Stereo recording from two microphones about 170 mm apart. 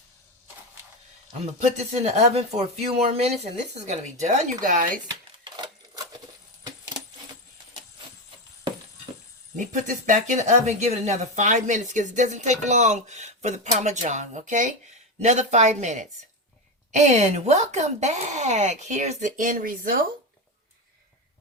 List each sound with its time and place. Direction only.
1.5 s speech: 40° right (ahead or behind)
9.6 s speech: 50° right (ahead or behind)